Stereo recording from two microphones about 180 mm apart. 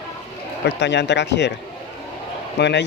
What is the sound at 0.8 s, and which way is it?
Speech, 75° left (ahead or behind).